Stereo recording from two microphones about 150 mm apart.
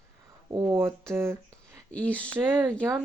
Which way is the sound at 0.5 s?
20° right (ahead or behind).